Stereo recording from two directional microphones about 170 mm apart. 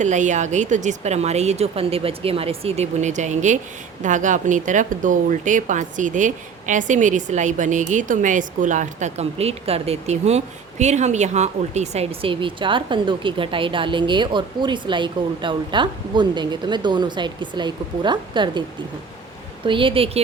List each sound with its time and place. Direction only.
0.0 s speech: 45° right (ahead or behind); by 18.6 s 25° right (ahead or behind)
19.6 s speech: 30° right (ahead or behind)